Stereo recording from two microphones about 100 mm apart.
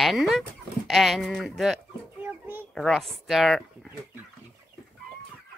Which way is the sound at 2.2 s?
20° right (ahead or behind).